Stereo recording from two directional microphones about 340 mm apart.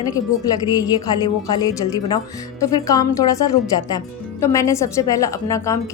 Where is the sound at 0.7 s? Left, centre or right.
Centre.